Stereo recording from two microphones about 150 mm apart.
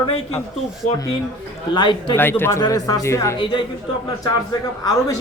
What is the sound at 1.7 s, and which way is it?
Speech, 30° left (ahead or behind).